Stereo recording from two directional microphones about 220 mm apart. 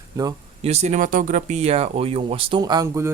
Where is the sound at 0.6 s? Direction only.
30° right (ahead or behind).